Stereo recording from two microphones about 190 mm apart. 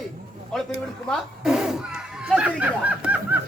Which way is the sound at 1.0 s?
Centre (ahead or behind).